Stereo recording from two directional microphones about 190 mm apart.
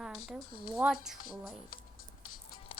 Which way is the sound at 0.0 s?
Centre (ahead or behind).